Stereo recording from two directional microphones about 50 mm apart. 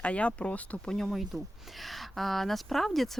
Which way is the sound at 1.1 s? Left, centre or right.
Centre.